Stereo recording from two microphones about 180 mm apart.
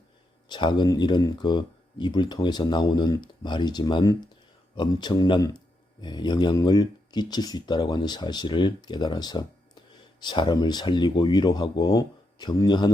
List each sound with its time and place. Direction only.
0.4 s speech: 25° left (ahead or behind)